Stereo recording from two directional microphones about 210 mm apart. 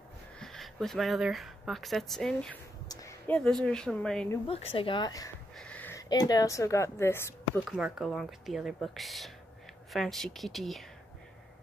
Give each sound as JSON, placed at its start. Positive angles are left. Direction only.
{"t": 0.4, "sound": "speech", "side_deg": 0}
{"t": 2.9, "sound": "a sound", "side_deg": 15}
{"t": 3.6, "sound": "speech", "side_deg": 5}
{"t": 4.5, "sound": "speech", "side_deg": 25}
{"t": 5.6, "sound": "speech", "side_deg": 5}
{"t": 7.7, "sound": "speech", "side_deg": 0}